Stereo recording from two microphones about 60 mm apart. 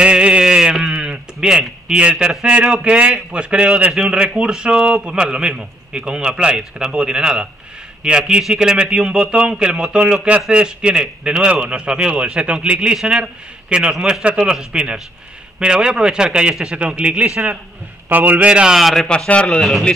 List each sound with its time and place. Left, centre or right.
0.0 s a sound: centre
2.0 s a man's voice: centre
18.0 s a man's voice: right; by 18.8 s centre
18.8 s speech: centre
19.0 s a man's voice: centre